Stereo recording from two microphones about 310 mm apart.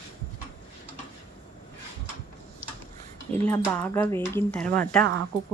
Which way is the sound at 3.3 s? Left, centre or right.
Centre.